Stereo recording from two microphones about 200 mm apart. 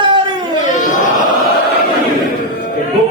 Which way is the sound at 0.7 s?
40° left (ahead or behind).